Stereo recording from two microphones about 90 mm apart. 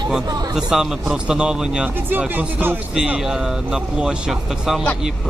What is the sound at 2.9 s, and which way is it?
Speech, 10° right (ahead or behind).